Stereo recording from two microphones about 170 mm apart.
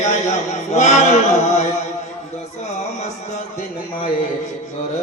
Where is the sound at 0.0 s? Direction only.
45° left (ahead or behind).